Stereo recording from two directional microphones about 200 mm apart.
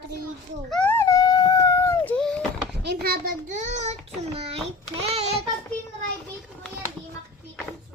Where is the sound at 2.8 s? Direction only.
55° right (ahead or behind); by 3.9 s 35° right (ahead or behind).